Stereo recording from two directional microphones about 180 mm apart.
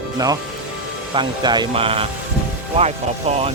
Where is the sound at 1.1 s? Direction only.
25° right (ahead or behind).